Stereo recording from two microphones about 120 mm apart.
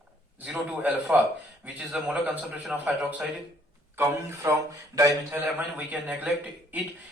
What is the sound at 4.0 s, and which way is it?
Speech, 20° right (ahead or behind).